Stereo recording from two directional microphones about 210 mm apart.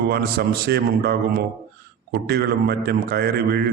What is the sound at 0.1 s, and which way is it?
A man's voice, 50° right (ahead or behind).